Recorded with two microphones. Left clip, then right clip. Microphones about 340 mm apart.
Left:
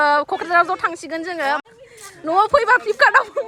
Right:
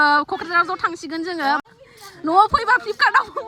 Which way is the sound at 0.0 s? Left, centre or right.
Centre.